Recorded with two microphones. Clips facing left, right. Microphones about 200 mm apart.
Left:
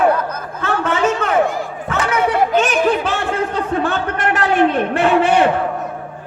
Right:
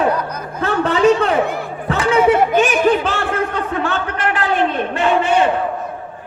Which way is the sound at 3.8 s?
45° left (ahead or behind).